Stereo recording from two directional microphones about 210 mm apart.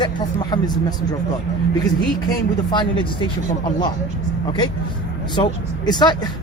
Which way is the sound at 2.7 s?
25° left (ahead or behind).